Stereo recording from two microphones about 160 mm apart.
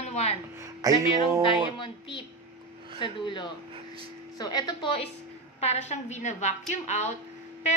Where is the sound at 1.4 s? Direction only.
30° left (ahead or behind).